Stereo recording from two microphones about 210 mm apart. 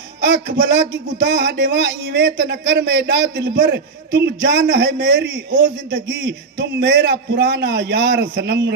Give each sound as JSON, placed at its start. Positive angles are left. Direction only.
{"t": 0.2, "sound": "a man's voice", "side_deg": -50}